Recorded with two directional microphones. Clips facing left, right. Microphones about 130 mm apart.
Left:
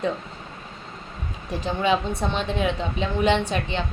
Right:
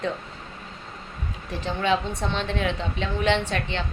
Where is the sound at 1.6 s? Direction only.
10° left (ahead or behind).